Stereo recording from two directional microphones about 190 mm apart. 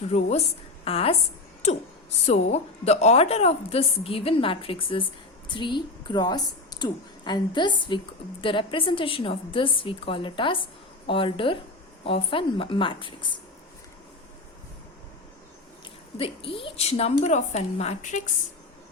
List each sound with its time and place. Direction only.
0.0 s a woman's voice: 35° left (ahead or behind)
2.2 s a woman's voice: 35° left (ahead or behind)
16.1 s a woman's voice: 30° left (ahead or behind)